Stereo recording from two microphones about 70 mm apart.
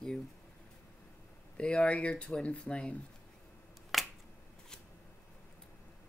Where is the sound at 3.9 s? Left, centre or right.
Centre.